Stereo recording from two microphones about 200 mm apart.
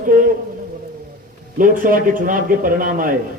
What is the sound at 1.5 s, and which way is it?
A man's voice, 40° right (ahead or behind).